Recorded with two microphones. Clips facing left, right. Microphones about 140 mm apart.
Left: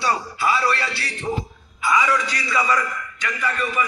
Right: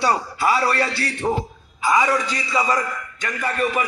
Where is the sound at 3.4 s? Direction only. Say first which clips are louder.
Right 2 dB; 55° right (ahead or behind).